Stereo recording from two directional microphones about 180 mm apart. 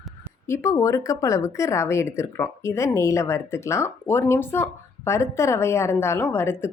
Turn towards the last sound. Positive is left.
turn(degrees=15)  # may be behind; listen again after turning